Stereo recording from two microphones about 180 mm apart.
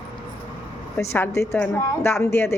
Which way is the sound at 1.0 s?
15° left (ahead or behind).